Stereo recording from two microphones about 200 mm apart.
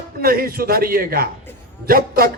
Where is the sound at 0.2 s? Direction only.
50° right (ahead or behind).